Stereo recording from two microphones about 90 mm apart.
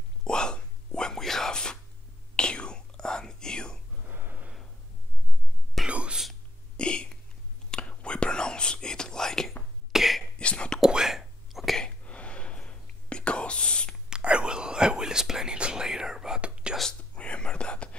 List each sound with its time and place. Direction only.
0.2 s whispering: 10° left (ahead or behind)
4.0 s a sound: 20° right (ahead or behind)
5.9 s whispering: 10° right (ahead or behind)
6.8 s a sound: 10° left (ahead or behind)
7.7 s whispering: 10° left (ahead or behind)
9.9 s a sound: centre (ahead or behind)
10.4 s whispering: 10° left (ahead or behind)
10.8 s whispering: 5° right (ahead or behind)
12.0 s whispering: 15° left (ahead or behind)
14.0 s whispering: 10° right (ahead or behind)
17.1 s whispering: 15° left (ahead or behind)